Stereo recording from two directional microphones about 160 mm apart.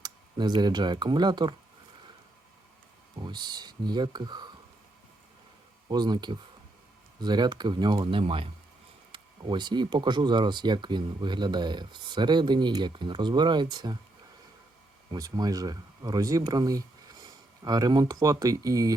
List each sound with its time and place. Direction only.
0.0 s speech: 25° right (ahead or behind)
3.2 s speech: 30° right (ahead or behind)
5.9 s speech: 25° right (ahead or behind)
15.1 s speech: 25° right (ahead or behind)